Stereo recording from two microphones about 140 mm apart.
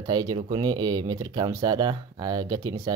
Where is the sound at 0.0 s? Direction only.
30° right (ahead or behind).